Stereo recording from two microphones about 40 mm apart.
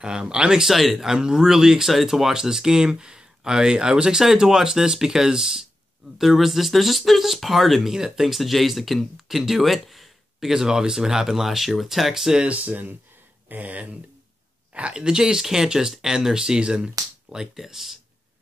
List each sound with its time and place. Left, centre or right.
0.0 s speech: centre
0.7 s speech: centre
1.0 s speech: centre
10.5 s speech: centre
12.4 s speech: right
14.7 s speech: right
17.6 s speech: centre